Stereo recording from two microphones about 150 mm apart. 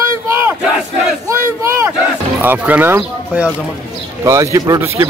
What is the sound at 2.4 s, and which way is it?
Speech, 15° right (ahead or behind).